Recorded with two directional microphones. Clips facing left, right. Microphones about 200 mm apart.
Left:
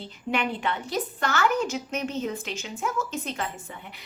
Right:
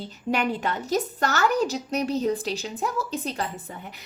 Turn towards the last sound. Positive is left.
turn(degrees=-35)  # may be behind; listen again after turning